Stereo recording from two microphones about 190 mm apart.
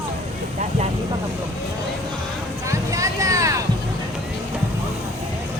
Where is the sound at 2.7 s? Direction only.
15° right (ahead or behind).